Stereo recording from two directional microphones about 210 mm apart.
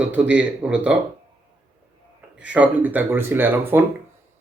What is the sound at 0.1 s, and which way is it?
Speech, 5° right (ahead or behind).